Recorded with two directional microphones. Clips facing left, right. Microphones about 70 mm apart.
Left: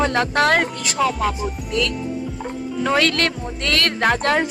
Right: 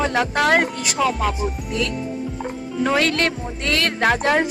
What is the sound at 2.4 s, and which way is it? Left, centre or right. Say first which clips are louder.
Music: right 2 dB; centre.